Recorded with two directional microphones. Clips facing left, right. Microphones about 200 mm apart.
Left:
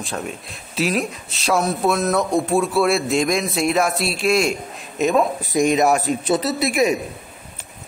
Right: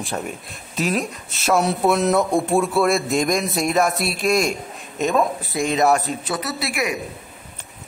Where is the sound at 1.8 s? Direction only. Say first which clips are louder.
Right 2 dB; 15° right (ahead or behind).